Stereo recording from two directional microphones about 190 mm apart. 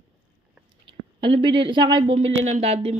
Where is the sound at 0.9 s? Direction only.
25° right (ahead or behind).